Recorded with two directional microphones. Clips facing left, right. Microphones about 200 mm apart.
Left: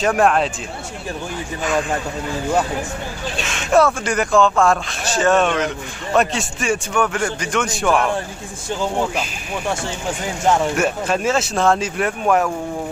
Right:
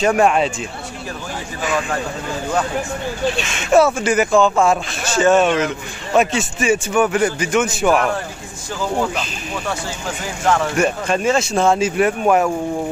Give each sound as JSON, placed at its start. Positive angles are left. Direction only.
{"t": 0.0, "sound": "speech", "side_deg": 0}
{"t": 3.4, "sound": "speech", "side_deg": -5}
{"t": 10.4, "sound": "speech", "side_deg": 20}
{"t": 10.8, "sound": "speech", "side_deg": 5}